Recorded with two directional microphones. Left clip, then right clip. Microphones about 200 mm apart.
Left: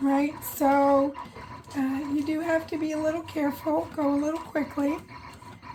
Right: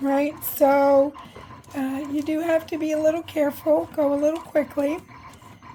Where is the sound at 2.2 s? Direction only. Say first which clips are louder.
Right 6 dB; 45° right (ahead or behind).